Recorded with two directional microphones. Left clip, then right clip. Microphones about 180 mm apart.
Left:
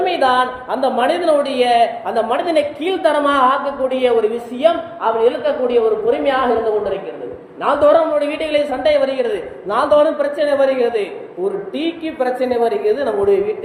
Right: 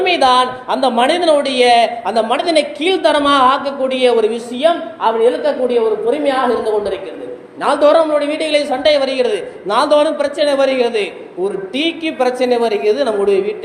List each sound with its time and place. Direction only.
0.0 s a woman's voice: 35° right (ahead or behind)
7.6 s a woman's voice: 30° right (ahead or behind)